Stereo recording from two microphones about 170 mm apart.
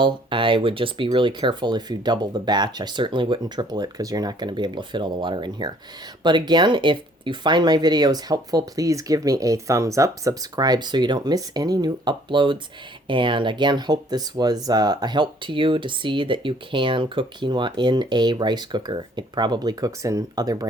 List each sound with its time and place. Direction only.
0.0 s speech: 30° right (ahead or behind)